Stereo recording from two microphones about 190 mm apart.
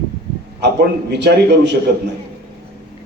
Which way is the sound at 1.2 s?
60° right (ahead or behind).